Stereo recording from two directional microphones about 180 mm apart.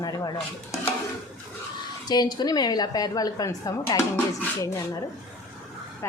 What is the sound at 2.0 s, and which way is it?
A woman's voice, 20° left (ahead or behind).